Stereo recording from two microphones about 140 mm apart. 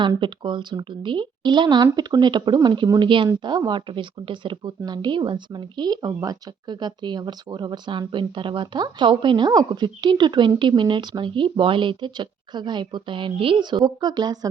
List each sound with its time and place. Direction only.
0.2 s speech: 35° right (ahead or behind)